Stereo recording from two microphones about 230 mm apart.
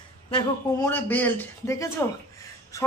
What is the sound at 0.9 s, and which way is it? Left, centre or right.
Speech, centre.